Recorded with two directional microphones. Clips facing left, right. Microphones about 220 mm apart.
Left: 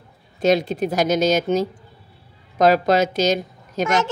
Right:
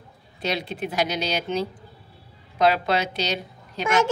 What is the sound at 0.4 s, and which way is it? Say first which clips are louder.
A woman's voice: left 10 dB; 45° left (ahead or behind).